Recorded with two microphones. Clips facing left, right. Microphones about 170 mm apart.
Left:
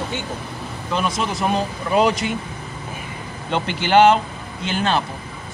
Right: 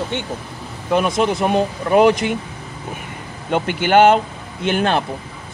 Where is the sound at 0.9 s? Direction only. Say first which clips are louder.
Right 6 dB; 55° right (ahead or behind).